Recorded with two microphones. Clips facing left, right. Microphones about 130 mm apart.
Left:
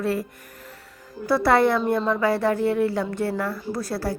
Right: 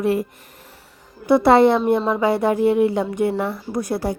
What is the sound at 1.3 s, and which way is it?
A woman's voice, 25° right (ahead or behind).